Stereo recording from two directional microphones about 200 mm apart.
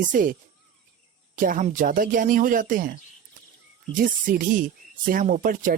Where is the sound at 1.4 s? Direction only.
40° right (ahead or behind).